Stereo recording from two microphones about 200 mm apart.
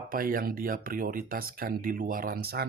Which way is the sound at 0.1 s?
45° right (ahead or behind).